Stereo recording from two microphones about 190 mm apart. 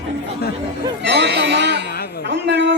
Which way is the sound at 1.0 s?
60° right (ahead or behind).